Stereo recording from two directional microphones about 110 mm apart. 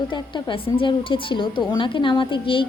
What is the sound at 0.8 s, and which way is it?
A woman's voice, 50° left (ahead or behind).